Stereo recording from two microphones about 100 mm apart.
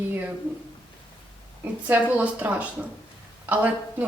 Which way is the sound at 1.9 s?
15° right (ahead or behind).